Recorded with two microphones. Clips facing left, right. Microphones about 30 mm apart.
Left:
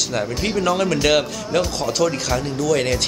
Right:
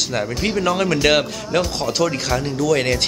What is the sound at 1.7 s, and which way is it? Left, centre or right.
Speech, right.